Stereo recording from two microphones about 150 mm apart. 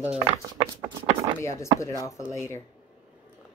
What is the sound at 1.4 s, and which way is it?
Speech, 20° left (ahead or behind).